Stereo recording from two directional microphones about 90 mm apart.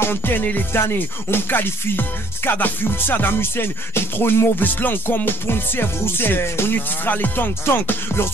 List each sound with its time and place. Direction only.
0.0 s music: 25° left (ahead or behind)